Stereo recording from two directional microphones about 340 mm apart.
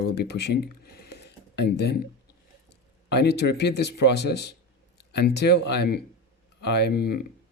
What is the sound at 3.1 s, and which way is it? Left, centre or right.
Speech, left.